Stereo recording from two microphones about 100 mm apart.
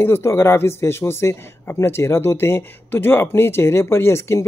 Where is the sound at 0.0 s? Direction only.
25° left (ahead or behind).